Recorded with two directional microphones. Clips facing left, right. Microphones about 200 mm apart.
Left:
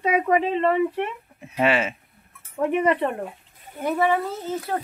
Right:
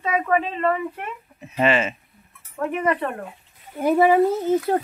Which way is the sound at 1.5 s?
10° left (ahead or behind).